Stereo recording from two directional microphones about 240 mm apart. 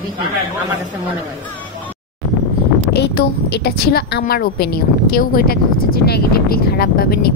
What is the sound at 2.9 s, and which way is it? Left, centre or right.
A woman's voice, left.